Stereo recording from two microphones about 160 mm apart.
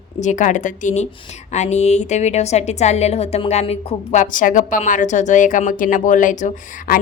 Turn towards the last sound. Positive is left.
turn(degrees=55)  # may be behind; listen again after turning